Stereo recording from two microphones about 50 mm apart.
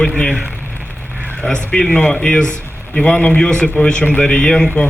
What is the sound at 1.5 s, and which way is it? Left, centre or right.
A man's voice, centre.